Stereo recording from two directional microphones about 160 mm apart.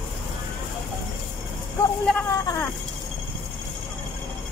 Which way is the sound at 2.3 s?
20° left (ahead or behind).